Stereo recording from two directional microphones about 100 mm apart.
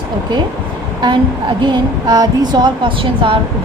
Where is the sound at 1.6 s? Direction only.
50° right (ahead or behind).